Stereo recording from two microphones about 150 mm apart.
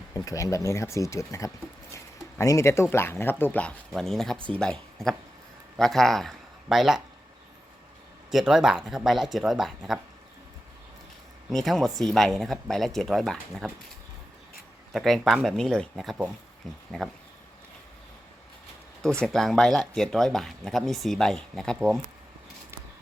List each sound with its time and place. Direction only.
0.1 s speech: 20° left (ahead or behind); by 7.0 s 5° right (ahead or behind)
8.3 s speech: centre (ahead or behind)
11.5 s speech: centre (ahead or behind)
14.9 s speech: centre (ahead or behind)
19.2 s speech: centre (ahead or behind)